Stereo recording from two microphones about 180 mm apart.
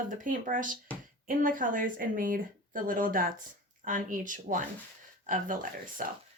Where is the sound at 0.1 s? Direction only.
50° right (ahead or behind).